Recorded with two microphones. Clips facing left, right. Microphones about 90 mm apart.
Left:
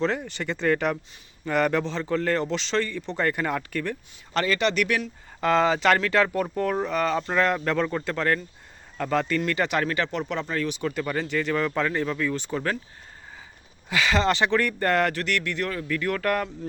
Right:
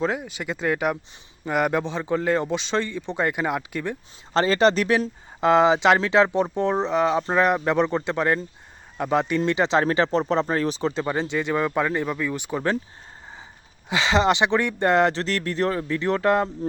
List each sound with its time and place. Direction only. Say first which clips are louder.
0.0 s speech: even; 10° right (ahead or behind)
4.4 s speech: right 5 dB; 30° right (ahead or behind)
5.4 s speech: right 4 dB; 20° right (ahead or behind)
13.9 s speech: right 3 dB; 20° right (ahead or behind)